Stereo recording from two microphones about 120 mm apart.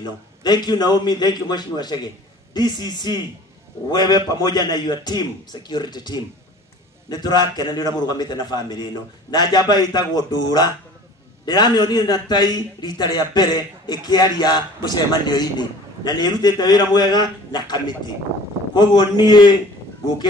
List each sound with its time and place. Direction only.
0.0 s a man's voice: 35° left (ahead or behind)